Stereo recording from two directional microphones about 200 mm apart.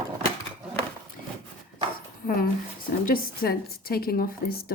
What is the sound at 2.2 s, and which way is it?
A woman's voice, 45° left (ahead or behind).